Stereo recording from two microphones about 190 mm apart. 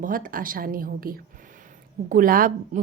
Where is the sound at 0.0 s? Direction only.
45° right (ahead or behind).